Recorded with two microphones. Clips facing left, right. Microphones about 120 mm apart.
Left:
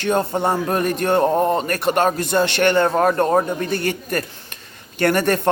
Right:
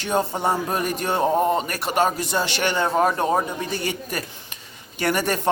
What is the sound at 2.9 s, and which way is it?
Speech, 10° right (ahead or behind).